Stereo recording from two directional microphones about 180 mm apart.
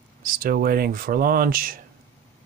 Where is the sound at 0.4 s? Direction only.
55° right (ahead or behind).